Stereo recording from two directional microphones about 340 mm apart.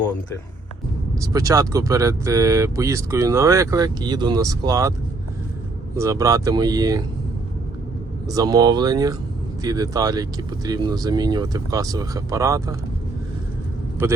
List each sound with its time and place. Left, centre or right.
1.2 s speech: centre
6.0 s speech: centre
8.3 s speech: centre
14.0 s speech: centre